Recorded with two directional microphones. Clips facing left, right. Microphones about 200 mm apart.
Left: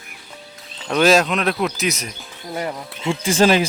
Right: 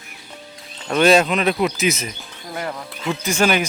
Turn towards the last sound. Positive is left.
turn(degrees=30)  # may be behind; listen again after turning